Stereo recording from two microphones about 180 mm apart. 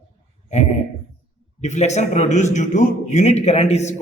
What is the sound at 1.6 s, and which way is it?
Speech, 40° left (ahead or behind).